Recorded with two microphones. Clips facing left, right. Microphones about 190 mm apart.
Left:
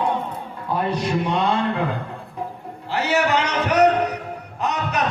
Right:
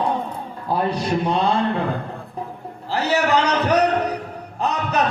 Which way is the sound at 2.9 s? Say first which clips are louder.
Right 1 dB; 35° right (ahead or behind).